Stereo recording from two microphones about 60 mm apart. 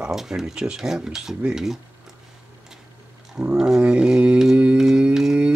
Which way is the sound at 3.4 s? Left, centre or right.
Centre.